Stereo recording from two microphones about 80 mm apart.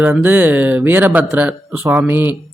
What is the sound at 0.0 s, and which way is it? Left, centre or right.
Speech, right.